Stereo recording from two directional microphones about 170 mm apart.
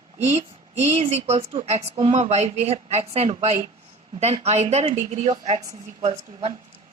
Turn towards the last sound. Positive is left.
turn(degrees=-35)  # may be behind; listen again after turning